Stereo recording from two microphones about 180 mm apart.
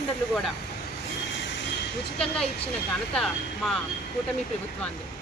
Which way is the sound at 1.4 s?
85° left.